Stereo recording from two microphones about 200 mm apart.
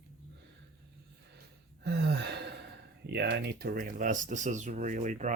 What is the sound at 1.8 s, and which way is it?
Speech, 55° right (ahead or behind).